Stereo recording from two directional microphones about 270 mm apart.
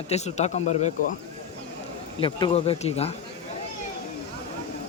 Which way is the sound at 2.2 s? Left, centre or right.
Centre.